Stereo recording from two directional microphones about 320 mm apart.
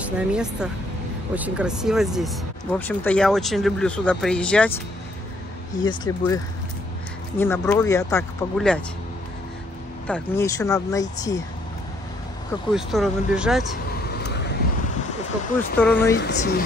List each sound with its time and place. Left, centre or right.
0.0 s speech: centre
5.9 s speech: centre
10.0 s speech: centre
12.7 s speech: centre
14.0 s vehicle: left
15.8 s speech: centre
16.2 s speech: left